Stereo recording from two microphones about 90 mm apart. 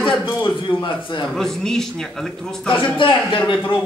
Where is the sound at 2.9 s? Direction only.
70° left (ahead or behind).